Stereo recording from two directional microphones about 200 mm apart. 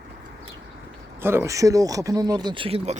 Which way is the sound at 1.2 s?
15° right (ahead or behind).